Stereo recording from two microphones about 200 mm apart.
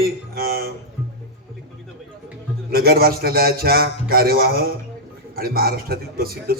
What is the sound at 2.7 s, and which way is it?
A man's voice, 50° right (ahead or behind).